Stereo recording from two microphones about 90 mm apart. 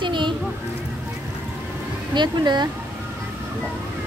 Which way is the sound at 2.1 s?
55° right (ahead or behind).